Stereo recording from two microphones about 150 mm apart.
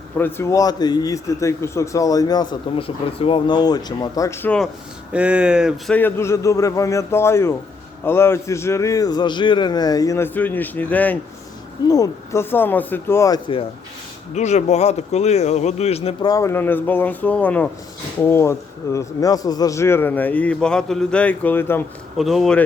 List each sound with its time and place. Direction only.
0.2 s a man's voice: 15° left (ahead or behind)
4.4 s speech: 5° left (ahead or behind)
5.1 s speech: 10° right (ahead or behind)
5.9 s a man's voice: 15° left (ahead or behind)
11.9 s a man's voice: 25° left (ahead or behind)
14.3 s a man's voice: 50° left (ahead or behind)
16.2 s a man's voice: 20° left (ahead or behind)
22.2 s speech: centre (ahead or behind)